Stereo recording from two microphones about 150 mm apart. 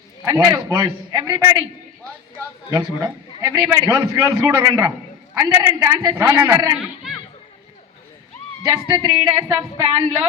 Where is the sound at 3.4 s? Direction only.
25° right (ahead or behind).